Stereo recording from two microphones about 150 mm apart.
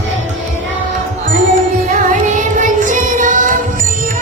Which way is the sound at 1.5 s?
60° right (ahead or behind).